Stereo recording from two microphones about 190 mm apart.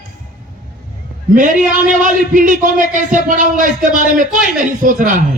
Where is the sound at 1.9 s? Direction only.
45° right (ahead or behind).